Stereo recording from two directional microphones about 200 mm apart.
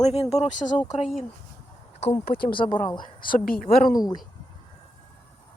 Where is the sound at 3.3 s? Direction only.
45° left (ahead or behind).